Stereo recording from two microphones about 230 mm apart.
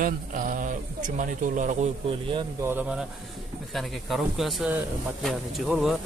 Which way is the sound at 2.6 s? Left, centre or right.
Centre.